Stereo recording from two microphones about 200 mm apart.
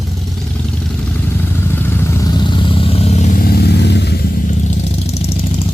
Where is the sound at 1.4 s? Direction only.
10° left (ahead or behind); by 5.3 s 30° left (ahead or behind).